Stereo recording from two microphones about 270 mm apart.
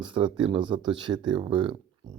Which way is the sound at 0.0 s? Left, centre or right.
Centre.